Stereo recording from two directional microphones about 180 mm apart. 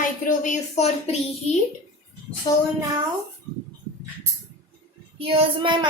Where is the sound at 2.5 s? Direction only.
25° left (ahead or behind).